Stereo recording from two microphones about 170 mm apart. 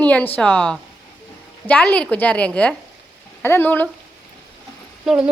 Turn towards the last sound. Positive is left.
turn(degrees=-5)  # may be behind; listen again after turning